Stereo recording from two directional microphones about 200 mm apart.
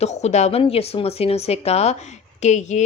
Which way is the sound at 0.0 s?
35° left (ahead or behind).